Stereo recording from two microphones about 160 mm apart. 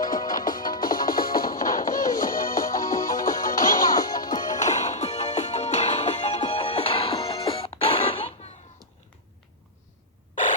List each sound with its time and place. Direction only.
0.0 s music: 60° left (ahead or behind)
2.7 s music: 20° left (ahead or behind)
3.1 s music: 60° left (ahead or behind)
3.8 s music: 25° left (ahead or behind)
4.5 s music: 50° left (ahead or behind)